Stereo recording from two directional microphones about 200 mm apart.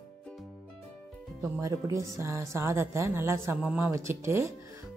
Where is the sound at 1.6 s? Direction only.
15° right (ahead or behind).